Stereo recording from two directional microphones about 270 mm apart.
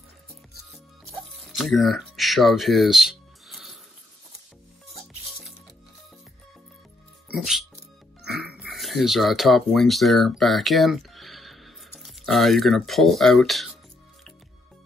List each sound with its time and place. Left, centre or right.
1.5 s speech: centre
7.3 s speech: centre